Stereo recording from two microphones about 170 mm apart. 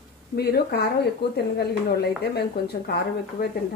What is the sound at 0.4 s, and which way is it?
Speech, 70° left (ahead or behind).